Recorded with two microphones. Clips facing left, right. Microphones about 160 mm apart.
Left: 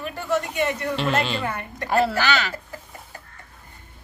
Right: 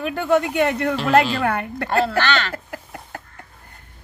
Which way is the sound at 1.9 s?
5° left (ahead or behind).